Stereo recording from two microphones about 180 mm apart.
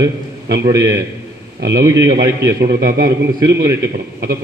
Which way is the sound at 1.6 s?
70° right (ahead or behind).